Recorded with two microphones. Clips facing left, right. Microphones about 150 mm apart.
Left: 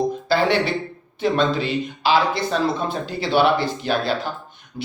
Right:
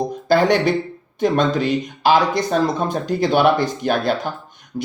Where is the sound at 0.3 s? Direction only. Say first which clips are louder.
Right 6 dB; 45° right (ahead or behind).